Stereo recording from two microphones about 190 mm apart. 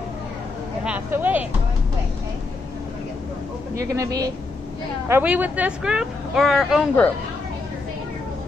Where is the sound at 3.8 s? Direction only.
15° right (ahead or behind); by 7.1 s 5° left (ahead or behind).